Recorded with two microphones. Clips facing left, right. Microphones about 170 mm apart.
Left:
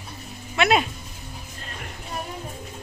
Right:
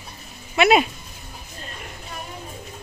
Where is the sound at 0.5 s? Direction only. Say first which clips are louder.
Right 4 dB; 10° right (ahead or behind).